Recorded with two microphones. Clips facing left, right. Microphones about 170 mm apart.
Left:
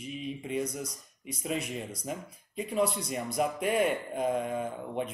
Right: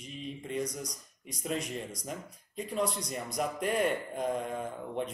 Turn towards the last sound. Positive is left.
turn(degrees=5)  # may be behind; listen again after turning